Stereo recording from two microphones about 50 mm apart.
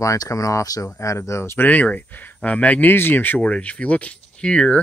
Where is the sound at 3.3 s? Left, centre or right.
Left.